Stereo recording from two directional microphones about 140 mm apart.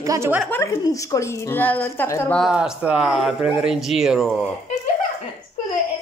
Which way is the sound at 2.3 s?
5° right (ahead or behind).